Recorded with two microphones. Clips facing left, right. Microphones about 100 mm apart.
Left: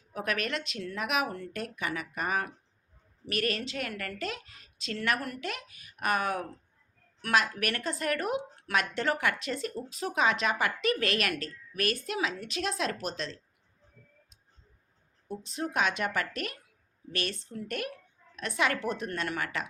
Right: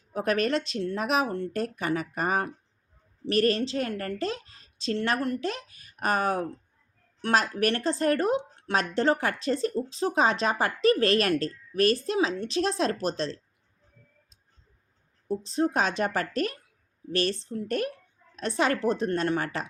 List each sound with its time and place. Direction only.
0.1 s a woman's voice: 35° right (ahead or behind)
15.3 s a woman's voice: 35° right (ahead or behind)